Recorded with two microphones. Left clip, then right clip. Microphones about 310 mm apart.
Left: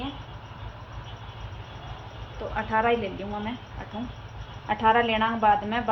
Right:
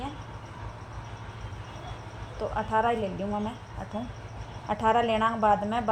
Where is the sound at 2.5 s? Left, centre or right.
Right.